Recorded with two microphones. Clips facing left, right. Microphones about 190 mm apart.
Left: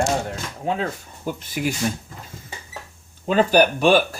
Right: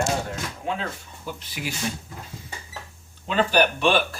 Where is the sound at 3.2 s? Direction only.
45° left (ahead or behind).